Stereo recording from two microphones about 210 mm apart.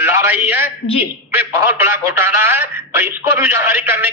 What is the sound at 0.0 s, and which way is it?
A man's voice, 10° right (ahead or behind).